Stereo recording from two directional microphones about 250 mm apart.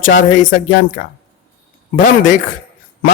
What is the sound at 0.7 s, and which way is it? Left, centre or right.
Speech, left.